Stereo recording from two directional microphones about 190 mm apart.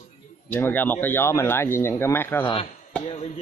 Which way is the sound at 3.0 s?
35° left (ahead or behind).